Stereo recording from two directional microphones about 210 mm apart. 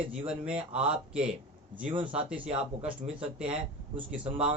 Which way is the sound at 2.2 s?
5° right (ahead or behind).